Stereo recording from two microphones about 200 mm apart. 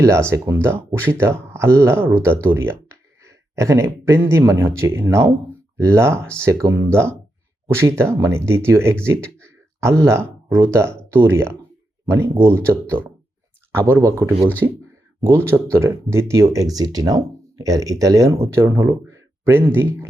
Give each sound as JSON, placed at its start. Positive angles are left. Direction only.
{"t": 0.0, "sound": "speech", "side_deg": -15}